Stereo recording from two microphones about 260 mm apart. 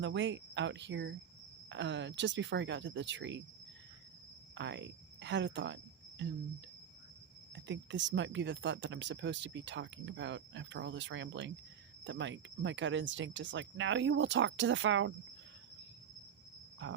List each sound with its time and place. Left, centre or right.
0.0 s speech: right
4.5 s speech: right
7.5 s speech: right
16.8 s speech: right